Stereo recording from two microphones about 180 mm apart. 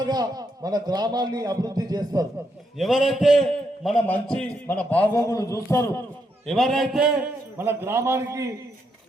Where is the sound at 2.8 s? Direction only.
Centre (ahead or behind); by 6.0 s 15° left (ahead or behind).